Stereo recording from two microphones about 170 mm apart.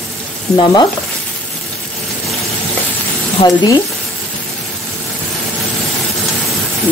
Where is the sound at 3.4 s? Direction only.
25° left (ahead or behind).